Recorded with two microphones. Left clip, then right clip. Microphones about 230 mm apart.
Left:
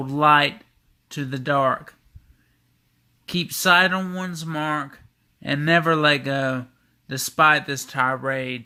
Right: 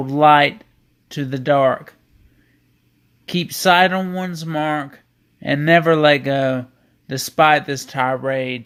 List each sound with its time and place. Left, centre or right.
0.0 s speech: centre
3.2 s speech: centre